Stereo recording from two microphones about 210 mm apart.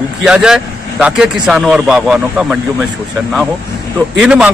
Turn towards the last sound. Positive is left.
turn(degrees=-5)  # may be behind; listen again after turning